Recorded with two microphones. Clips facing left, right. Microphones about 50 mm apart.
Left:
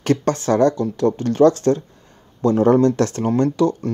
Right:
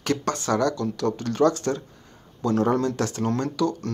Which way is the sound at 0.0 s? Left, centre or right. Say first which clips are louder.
Left 6 dB; left.